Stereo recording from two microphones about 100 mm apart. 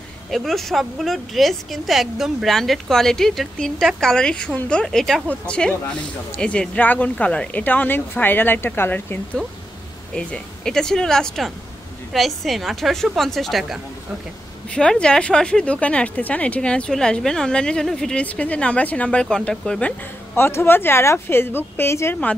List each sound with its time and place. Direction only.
0.3 s a woman's voice: centre (ahead or behind); by 9.2 s 20° left (ahead or behind)
10.1 s a woman's voice: 10° left (ahead or behind)
20.3 s a woman's voice: 25° left (ahead or behind)